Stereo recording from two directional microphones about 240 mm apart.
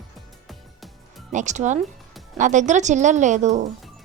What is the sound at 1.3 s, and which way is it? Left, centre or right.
A woman's voice, right.